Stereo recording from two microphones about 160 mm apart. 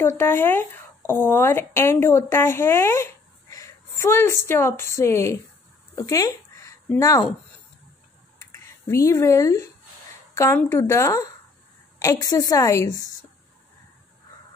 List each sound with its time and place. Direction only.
0.0 s speech: 15° left (ahead or behind)
8.4 s a woman's voice: 15° left (ahead or behind)